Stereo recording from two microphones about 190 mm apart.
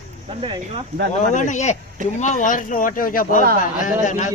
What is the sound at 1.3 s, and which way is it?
A man's voice, 40° left (ahead or behind).